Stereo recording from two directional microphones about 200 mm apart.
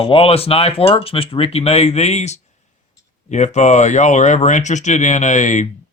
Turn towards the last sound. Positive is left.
turn(degrees=40)  # may be behind; listen again after turning